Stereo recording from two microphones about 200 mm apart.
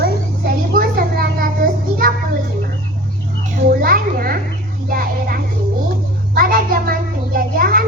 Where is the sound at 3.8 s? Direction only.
45° right (ahead or behind).